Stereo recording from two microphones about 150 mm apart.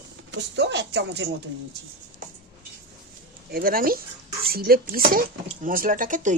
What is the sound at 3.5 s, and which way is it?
Speech, 75° right (ahead or behind).